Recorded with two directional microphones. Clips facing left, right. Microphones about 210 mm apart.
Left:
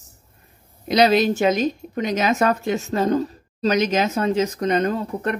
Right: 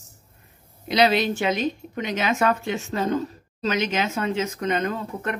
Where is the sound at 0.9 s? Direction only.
40° left (ahead or behind).